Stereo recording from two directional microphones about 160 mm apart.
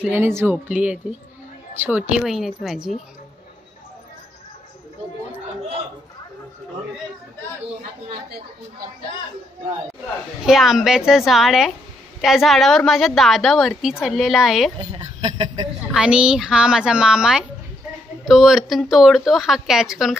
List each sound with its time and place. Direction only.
0.0 s a woman's voice: 15° right (ahead or behind)
10.4 s a woman's voice: centre (ahead or behind)
14.8 s speech: 30° right (ahead or behind)
15.9 s a woman's voice: 5° right (ahead or behind)